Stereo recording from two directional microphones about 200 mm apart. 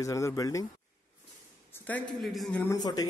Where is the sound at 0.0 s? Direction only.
15° left (ahead or behind).